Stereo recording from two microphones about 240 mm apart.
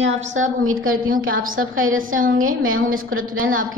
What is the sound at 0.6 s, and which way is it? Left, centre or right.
Speech, right.